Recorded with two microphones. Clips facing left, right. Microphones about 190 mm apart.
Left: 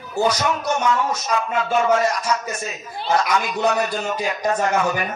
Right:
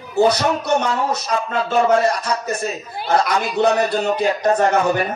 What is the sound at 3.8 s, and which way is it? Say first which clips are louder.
Speech: right 5 dB; 30° right (ahead or behind).